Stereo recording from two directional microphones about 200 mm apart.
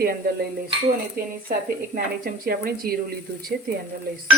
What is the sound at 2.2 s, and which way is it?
Speech, 50° right (ahead or behind).